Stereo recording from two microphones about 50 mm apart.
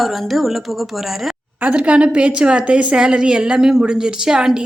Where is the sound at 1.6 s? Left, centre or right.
Right.